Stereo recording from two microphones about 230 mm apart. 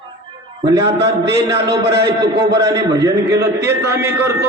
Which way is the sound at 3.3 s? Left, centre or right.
Right.